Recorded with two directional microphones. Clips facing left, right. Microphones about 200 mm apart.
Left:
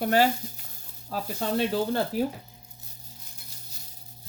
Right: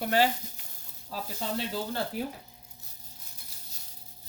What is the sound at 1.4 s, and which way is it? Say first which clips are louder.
Cutlery: left 7 dB; 55° left (ahead or behind).